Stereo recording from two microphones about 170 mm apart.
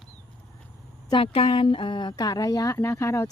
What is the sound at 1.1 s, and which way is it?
A woman's voice, 35° left (ahead or behind).